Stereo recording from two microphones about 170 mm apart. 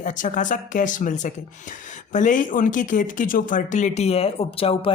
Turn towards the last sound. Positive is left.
turn(degrees=35)  # may be behind; listen again after turning